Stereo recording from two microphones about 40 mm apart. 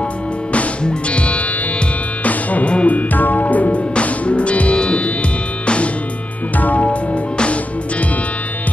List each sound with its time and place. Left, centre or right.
0.5 s music: left
3.9 s music: left
6.5 s music: left